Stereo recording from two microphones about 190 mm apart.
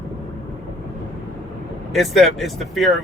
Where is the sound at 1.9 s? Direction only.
Centre (ahead or behind).